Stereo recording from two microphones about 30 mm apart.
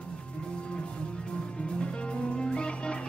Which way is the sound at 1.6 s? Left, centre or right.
Left.